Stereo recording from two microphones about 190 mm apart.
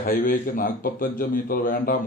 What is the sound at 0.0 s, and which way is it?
A man's voice, 50° left (ahead or behind).